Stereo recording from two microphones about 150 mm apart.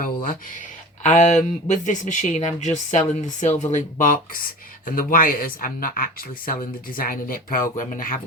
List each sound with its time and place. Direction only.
1.0 s speech: 50° left (ahead or behind)